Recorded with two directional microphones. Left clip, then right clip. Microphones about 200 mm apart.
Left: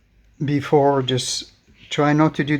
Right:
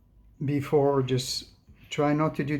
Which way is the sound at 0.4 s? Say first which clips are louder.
Left 7 dB; 45° left (ahead or behind).